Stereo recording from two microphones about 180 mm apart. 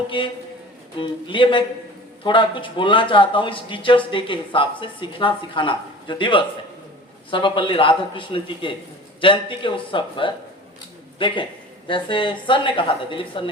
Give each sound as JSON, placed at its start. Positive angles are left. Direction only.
{"t": 0.1, "sound": "speech", "side_deg": 30}